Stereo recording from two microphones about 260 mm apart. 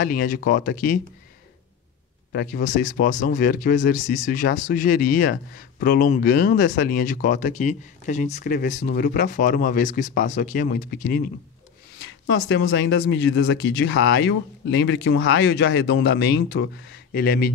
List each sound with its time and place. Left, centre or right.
0.0 s speech: left
2.3 s speech: left